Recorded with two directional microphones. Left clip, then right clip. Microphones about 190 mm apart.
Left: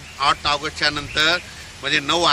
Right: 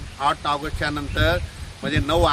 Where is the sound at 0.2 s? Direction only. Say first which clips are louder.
Left 3 dB; 55° right (ahead or behind).